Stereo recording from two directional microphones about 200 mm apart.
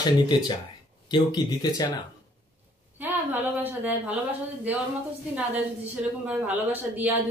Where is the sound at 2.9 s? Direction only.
10° right (ahead or behind).